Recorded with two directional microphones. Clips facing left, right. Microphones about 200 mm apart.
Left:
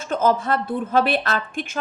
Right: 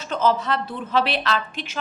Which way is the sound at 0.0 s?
50° left (ahead or behind).